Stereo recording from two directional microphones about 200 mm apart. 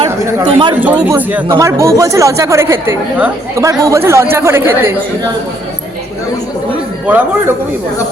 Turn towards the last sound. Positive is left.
turn(degrees=-10)  # may be behind; listen again after turning